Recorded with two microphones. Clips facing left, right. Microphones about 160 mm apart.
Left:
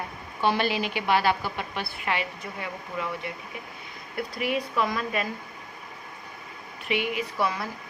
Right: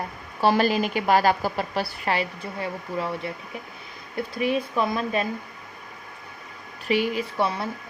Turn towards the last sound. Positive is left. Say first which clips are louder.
# right 2 dB
turn(degrees=-30)  # may be behind; listen again after turning